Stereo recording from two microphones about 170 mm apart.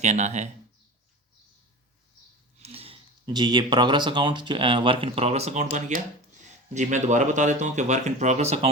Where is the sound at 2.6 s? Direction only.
35° right (ahead or behind).